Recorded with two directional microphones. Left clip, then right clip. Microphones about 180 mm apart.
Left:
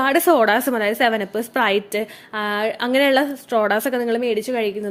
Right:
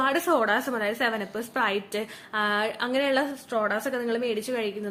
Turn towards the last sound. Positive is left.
turn(degrees=40)  # may be behind; listen again after turning